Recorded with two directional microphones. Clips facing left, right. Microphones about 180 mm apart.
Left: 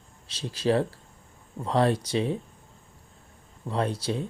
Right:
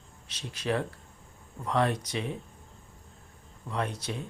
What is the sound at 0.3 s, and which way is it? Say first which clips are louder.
Speech: left 6 dB; 30° left (ahead or behind).